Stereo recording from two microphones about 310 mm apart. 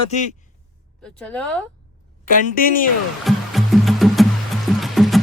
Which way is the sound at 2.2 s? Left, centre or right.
Left.